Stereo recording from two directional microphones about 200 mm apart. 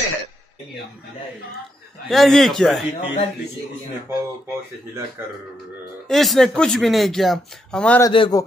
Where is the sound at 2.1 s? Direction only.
Centre (ahead or behind).